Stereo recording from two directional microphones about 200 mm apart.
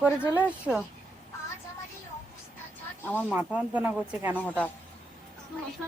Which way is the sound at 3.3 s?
10° right (ahead or behind).